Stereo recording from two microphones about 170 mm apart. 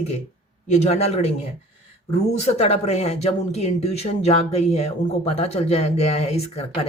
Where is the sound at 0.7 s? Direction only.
40° left (ahead or behind).